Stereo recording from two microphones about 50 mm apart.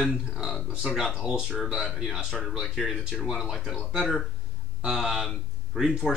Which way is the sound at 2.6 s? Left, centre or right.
Centre.